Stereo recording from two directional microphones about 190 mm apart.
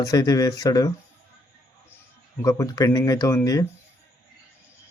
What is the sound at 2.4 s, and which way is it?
Speech, 15° left (ahead or behind).